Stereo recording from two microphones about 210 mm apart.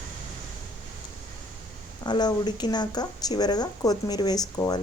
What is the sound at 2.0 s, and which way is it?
A woman's voice, 20° left (ahead or behind).